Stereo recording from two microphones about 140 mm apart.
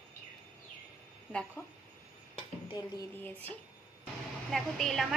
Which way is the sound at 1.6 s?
20° left (ahead or behind).